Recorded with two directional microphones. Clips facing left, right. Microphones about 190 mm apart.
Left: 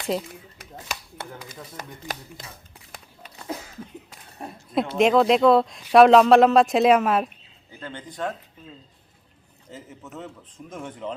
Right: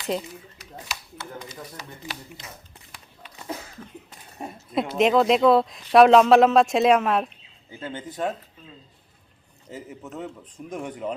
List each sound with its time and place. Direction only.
0.1 s speech: centre (ahead or behind)
0.6 s a sound: 55° left (ahead or behind)
1.7 s speech: 50° left (ahead or behind)
4.4 s speech: centre (ahead or behind)
7.8 s speech: 20° right (ahead or behind)
9.7 s speech: 15° right (ahead or behind)